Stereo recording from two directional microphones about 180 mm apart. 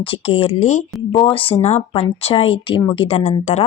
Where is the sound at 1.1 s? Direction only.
30° left (ahead or behind).